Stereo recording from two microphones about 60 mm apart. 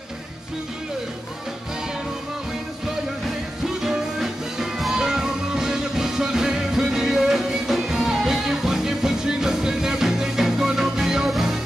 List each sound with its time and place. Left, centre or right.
3.6 s music: centre